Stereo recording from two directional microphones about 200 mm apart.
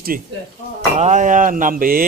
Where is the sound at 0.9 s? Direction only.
35° right (ahead or behind).